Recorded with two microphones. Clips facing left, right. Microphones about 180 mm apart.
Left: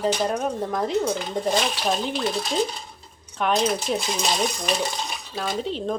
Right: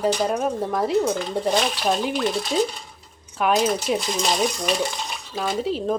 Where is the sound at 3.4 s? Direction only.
5° right (ahead or behind).